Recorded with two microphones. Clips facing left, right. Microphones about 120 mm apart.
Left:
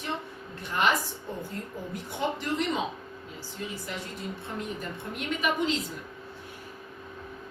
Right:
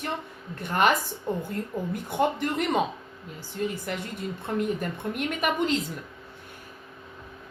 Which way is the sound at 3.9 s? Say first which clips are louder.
Right 4 dB; 55° right (ahead or behind).